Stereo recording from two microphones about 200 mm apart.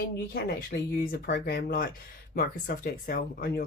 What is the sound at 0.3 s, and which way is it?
Speech, 50° left (ahead or behind).